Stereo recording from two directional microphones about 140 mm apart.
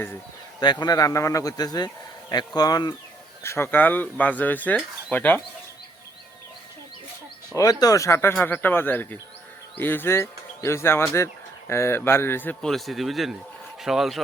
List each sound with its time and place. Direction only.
0.6 s speech: 30° left (ahead or behind)
3.4 s speech: 15° left (ahead or behind)
7.5 s speech: 25° left (ahead or behind)
12.7 s speech: centre (ahead or behind)